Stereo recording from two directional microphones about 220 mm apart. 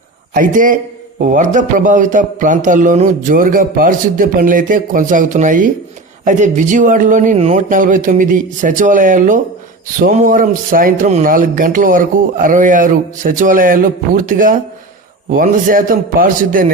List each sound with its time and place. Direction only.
0.3 s speech: 40° right (ahead or behind)